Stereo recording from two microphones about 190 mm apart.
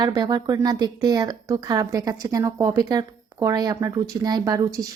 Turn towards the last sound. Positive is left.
turn(degrees=-20)  # may be behind; listen again after turning